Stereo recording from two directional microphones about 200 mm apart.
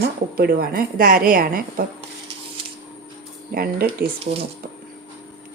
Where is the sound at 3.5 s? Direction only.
45° right (ahead or behind).